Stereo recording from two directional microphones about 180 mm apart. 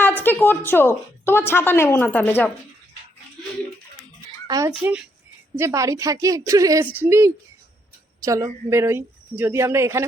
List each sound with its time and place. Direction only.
0.0 s a woman's voice: 10° left (ahead or behind)
4.4 s a child's voice: 20° right (ahead or behind)
4.7 s a child's voice: 5° right (ahead or behind)
5.5 s a woman's voice: 15° right (ahead or behind)